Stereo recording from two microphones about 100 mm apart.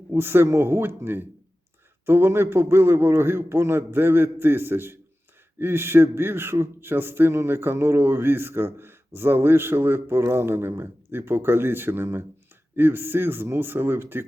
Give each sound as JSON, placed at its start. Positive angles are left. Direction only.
{"t": 0.1, "sound": "a man's voice", "side_deg": -20}